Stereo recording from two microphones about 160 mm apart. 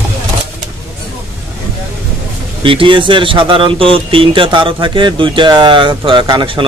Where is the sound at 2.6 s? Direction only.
30° right (ahead or behind).